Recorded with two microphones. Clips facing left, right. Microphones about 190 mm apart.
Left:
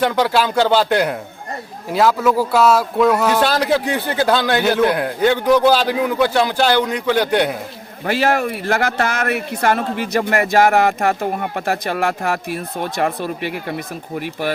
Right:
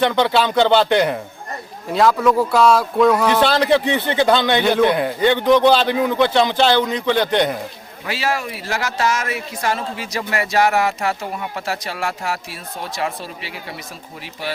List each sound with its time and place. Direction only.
0.0 s speech: 5° left (ahead or behind)
8.0 s speech: 50° left (ahead or behind)